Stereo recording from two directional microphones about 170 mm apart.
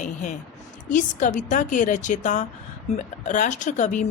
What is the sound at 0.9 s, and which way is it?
Speech, 50° left (ahead or behind).